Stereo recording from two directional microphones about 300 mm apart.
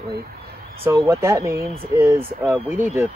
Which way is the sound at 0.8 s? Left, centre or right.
Centre.